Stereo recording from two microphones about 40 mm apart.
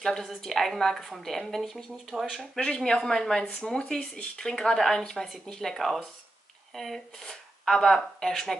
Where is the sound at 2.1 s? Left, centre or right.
Centre.